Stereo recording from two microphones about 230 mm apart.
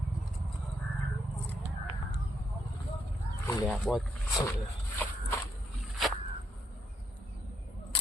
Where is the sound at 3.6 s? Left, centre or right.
Centre.